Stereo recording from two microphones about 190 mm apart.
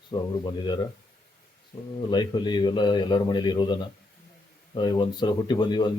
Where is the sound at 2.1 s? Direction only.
25° left (ahead or behind).